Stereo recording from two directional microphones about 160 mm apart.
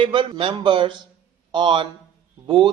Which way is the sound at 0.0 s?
30° right (ahead or behind).